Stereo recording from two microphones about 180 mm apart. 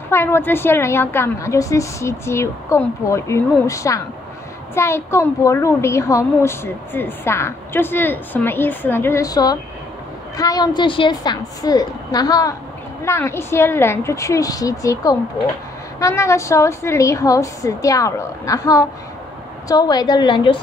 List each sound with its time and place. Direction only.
0.1 s a woman's voice: 15° left (ahead or behind)